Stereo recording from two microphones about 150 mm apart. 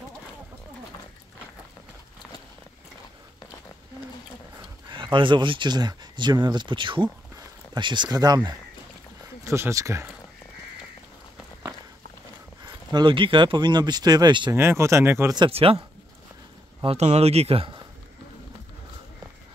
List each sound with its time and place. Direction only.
4.6 s speech: 30° right (ahead or behind)
12.6 s speech: 30° right (ahead or behind)
14.5 s speech: 15° right (ahead or behind)
15.3 s speech: 35° right (ahead or behind)
16.8 s speech: 45° right (ahead or behind)